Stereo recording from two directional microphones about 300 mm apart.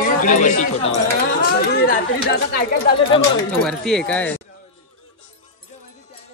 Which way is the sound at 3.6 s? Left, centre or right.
Centre.